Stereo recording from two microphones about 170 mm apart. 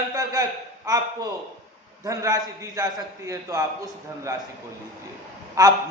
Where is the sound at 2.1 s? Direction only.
20° right (ahead or behind).